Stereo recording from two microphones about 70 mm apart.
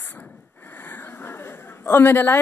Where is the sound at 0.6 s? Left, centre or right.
Left.